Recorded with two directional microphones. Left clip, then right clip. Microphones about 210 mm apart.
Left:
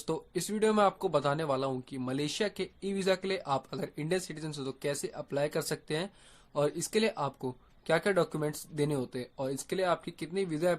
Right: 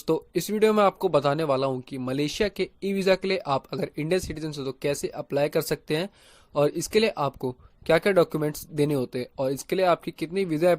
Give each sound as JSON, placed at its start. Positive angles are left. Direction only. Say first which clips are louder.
{"t": 0.0, "sound": "speech", "louder": "right 9 dB", "side_deg": -25}